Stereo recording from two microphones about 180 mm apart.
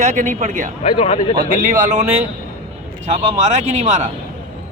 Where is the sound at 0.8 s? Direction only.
40° left (ahead or behind).